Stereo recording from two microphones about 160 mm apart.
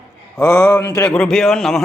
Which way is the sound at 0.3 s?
15° left (ahead or behind).